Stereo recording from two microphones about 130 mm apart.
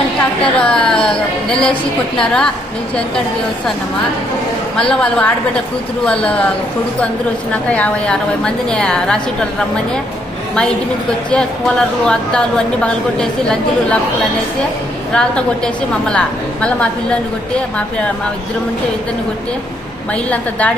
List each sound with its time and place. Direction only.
0.5 s a sound: 5° left (ahead or behind)
1.5 s speech: 5° left (ahead or behind)
4.8 s speech: 5° left (ahead or behind)
7.5 s speech: 10° left (ahead or behind)
11.3 s speech: 5° left (ahead or behind)
15.1 s speech: 5° left (ahead or behind)
20.3 s speech: 10° left (ahead or behind)